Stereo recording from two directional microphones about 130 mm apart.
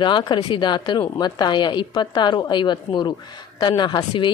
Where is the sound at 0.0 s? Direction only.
35° left (ahead or behind).